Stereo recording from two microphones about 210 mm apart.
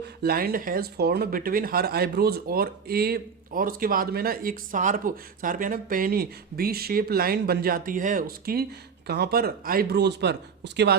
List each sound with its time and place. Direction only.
0.0 s speech: 50° right (ahead or behind)